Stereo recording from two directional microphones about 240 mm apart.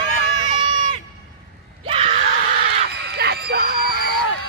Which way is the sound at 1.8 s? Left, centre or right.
Right.